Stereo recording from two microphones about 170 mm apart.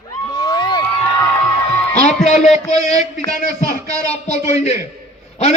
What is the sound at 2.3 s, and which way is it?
A man's voice, 40° left (ahead or behind).